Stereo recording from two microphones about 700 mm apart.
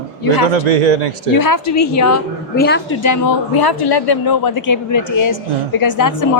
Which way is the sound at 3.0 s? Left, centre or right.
Left.